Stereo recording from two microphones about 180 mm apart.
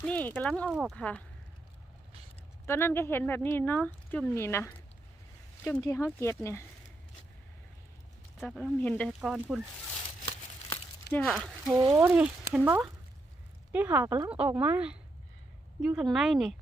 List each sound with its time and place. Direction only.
0.0 s speech: 10° left (ahead or behind)
0.7 s speech: 5° right (ahead or behind)
0.9 s speech: 5° left (ahead or behind)
2.6 s speech: 15° left (ahead or behind)
5.8 s speech: 15° left (ahead or behind)
8.4 s speech: centre (ahead or behind)
11.1 s speech: centre (ahead or behind)
11.7 s speech: 25° right (ahead or behind)
12.0 s speech: 5° right (ahead or behind)
16.0 s speech: centre (ahead or behind)